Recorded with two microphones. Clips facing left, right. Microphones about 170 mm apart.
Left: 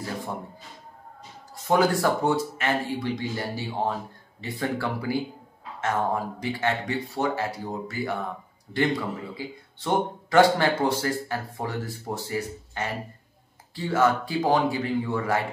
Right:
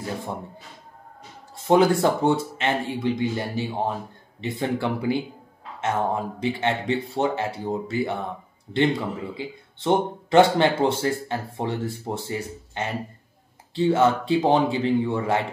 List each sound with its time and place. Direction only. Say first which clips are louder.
1.7 s speech: right 4 dB; 25° right (ahead or behind)
9.4 s speech: right 4 dB; 20° right (ahead or behind)